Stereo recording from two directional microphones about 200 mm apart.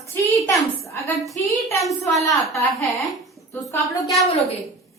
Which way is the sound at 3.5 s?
15° left (ahead or behind).